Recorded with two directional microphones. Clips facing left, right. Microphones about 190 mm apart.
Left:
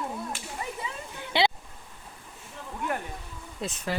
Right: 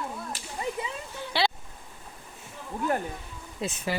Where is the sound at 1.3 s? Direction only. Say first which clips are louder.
Left 2 dB; 20° left (ahead or behind).